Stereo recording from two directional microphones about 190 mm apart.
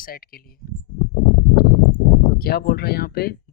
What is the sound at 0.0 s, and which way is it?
Speech, 50° left (ahead or behind).